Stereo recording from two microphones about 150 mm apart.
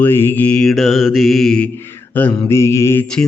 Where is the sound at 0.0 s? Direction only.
15° left (ahead or behind).